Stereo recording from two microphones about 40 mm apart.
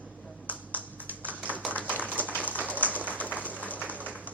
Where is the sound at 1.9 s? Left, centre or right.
Right.